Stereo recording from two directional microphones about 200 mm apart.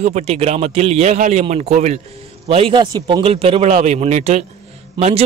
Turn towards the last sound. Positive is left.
turn(degrees=-30)  # may be behind; listen again after turning